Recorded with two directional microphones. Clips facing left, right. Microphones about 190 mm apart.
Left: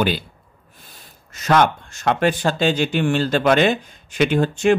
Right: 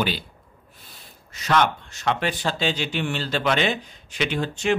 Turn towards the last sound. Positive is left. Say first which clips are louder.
# left 7 dB
turn(degrees=50)  # may be behind; listen again after turning